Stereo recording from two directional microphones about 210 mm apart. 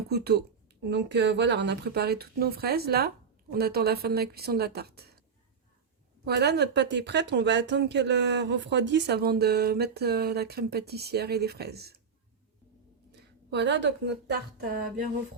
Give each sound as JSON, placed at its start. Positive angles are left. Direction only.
{"t": 0.1, "sound": "speech", "side_deg": -50}
{"t": 6.2, "sound": "speech", "side_deg": -50}
{"t": 13.1, "sound": "speech", "side_deg": -55}